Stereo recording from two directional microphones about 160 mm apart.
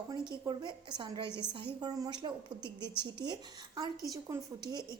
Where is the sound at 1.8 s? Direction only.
25° right (ahead or behind).